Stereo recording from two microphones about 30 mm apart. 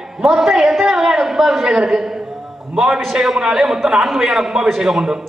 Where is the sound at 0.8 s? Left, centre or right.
Centre.